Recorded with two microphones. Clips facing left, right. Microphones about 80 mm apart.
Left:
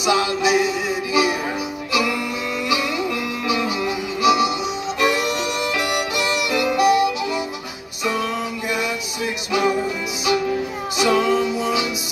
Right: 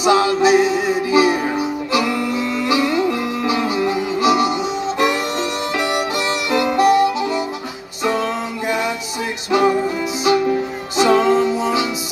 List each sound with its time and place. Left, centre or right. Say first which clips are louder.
0.0 s music: right 5 dB; right
11.0 s music: right 4 dB; right